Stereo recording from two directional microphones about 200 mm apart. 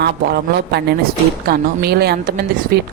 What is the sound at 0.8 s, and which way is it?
A woman's voice, 55° right (ahead or behind).